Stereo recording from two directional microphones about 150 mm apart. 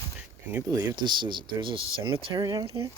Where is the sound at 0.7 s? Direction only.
20° right (ahead or behind).